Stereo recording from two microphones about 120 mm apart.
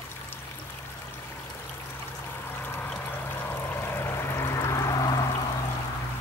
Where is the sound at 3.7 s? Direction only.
20° left (ahead or behind).